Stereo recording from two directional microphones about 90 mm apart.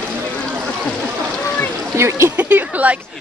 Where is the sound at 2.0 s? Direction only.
30° right (ahead or behind).